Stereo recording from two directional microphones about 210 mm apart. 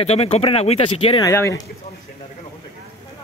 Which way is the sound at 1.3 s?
15° left (ahead or behind).